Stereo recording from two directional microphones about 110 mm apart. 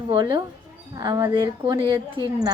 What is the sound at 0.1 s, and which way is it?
A woman's voice, 45° right (ahead or behind).